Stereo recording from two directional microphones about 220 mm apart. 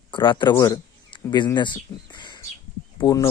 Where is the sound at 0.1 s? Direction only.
20° left (ahead or behind).